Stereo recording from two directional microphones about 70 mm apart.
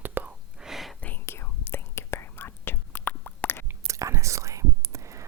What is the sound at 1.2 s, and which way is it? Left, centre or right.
Whispering, left.